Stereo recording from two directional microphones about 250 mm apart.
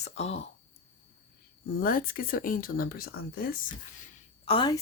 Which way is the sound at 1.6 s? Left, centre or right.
Left.